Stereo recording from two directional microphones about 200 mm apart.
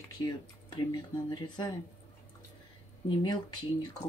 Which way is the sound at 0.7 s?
20° left (ahead or behind).